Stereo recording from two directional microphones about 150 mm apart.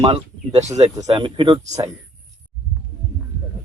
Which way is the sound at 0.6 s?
50° right (ahead or behind).